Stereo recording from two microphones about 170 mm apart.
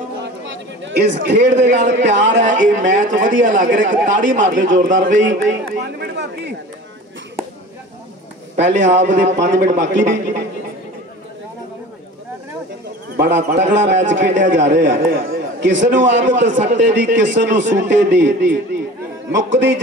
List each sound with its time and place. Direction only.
0.2 s a man's voice: 90° right
2.4 s speech: 50° right (ahead or behind)
4.5 s a man's voice: 90° right
8.5 s a man's voice: 90° right
13.2 s a man's voice: 85° right
16.0 s a man's voice: 90° right
16.5 s speech: 45° right (ahead or behind)
17.0 s a man's voice: 90° right